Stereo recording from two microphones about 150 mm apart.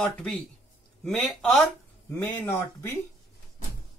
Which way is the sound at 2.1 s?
15° left (ahead or behind).